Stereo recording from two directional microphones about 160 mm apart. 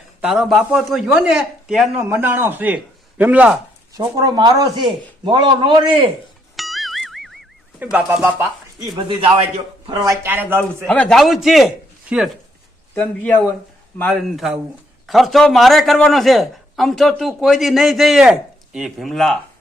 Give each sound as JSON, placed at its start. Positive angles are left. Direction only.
{"t": 0.2, "sound": "a man's voice", "side_deg": -5}
{"t": 3.9, "sound": "speech", "side_deg": -25}
{"t": 6.6, "sound": "music", "side_deg": 0}
{"t": 7.8, "sound": "a man's voice", "side_deg": -5}
{"t": 9.0, "sound": "a man's voice", "side_deg": -30}
{"t": 10.1, "sound": "a man's voice", "side_deg": -15}
{"t": 10.8, "sound": "a man's voice", "side_deg": 5}
{"t": 12.9, "sound": "a man's voice", "side_deg": 10}